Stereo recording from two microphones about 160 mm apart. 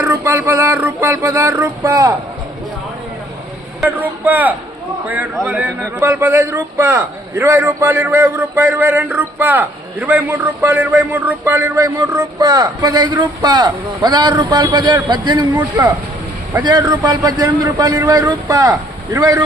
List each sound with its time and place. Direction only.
0.0 s a man's voice: 15° right (ahead or behind)
3.8 s a man's voice: 10° right (ahead or behind)